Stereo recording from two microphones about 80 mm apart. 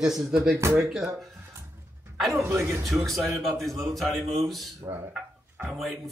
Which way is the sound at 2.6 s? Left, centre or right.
Right.